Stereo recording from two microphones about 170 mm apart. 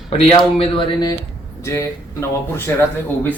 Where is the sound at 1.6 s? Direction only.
15° left (ahead or behind).